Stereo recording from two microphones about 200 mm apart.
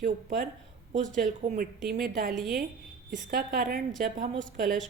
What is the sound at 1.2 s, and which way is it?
A woman's voice, 45° right (ahead or behind).